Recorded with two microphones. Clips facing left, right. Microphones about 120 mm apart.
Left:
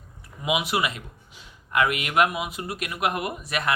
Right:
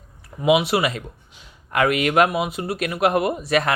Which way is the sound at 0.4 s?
35° right (ahead or behind).